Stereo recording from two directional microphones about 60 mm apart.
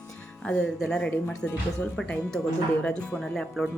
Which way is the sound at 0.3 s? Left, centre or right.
Centre.